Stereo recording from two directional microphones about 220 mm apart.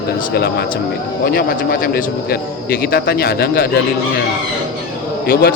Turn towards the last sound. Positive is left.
turn(degrees=40)  # may be behind; listen again after turning